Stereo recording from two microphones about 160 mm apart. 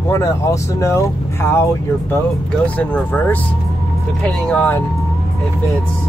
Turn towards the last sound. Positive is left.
turn(degrees=10)  # may be behind; listen again after turning